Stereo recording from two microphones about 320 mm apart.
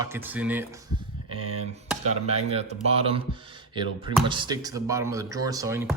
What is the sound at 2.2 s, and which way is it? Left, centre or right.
Speech, centre.